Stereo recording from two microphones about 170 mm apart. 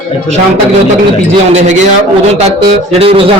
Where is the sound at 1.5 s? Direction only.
45° right (ahead or behind).